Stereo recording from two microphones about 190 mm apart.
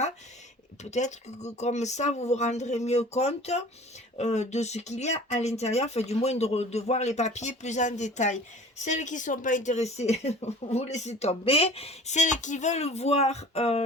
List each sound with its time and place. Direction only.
0.9 s speech: 35° left (ahead or behind)